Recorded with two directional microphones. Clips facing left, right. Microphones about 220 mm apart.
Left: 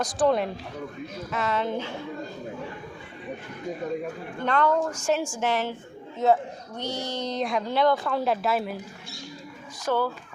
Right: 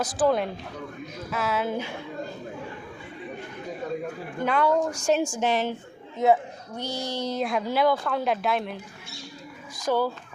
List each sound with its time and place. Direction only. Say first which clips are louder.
0.0 s speech: even; 5° right (ahead or behind)
4.4 s a woman's voice: even; 10° right (ahead or behind)
9.7 s a woman's voice: right 1 dB; 10° right (ahead or behind)